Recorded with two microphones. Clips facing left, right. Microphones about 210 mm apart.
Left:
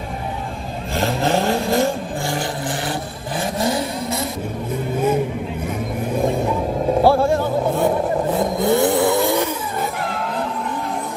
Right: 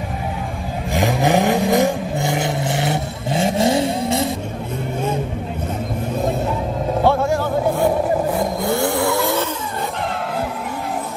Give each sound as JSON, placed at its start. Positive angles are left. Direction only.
{"t": 0.9, "sound": "vehicle", "side_deg": -15}
{"t": 7.0, "sound": "music", "side_deg": 30}
{"t": 8.5, "sound": "vehicle", "side_deg": 20}